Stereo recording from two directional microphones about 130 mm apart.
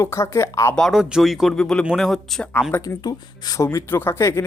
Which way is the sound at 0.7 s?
Centre (ahead or behind).